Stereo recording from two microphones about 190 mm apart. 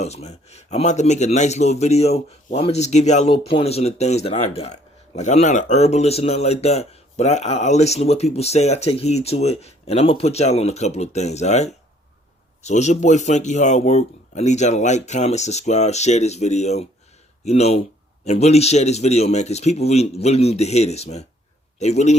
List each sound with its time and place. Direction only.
0.0 s speech: 35° left (ahead or behind)